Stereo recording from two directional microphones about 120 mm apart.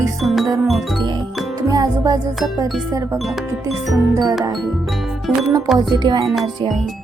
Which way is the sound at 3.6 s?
30° right (ahead or behind).